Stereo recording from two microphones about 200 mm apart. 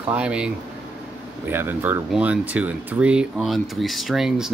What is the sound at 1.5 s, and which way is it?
Speech, 10° right (ahead or behind).